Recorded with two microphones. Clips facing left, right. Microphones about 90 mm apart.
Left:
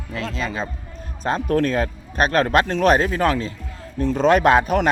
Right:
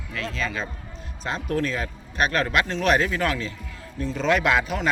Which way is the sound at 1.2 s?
45° left (ahead or behind).